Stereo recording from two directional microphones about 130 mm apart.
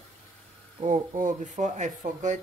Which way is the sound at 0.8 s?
85° right.